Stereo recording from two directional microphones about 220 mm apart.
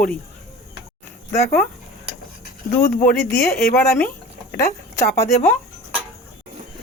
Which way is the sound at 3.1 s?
5° left (ahead or behind).